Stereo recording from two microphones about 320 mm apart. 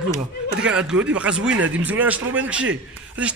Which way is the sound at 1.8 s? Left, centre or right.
Centre.